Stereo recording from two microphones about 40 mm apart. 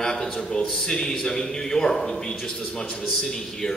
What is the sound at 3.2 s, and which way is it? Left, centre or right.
Speech, centre.